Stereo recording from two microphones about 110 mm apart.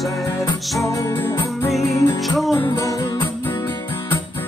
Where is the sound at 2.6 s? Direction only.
30° left (ahead or behind).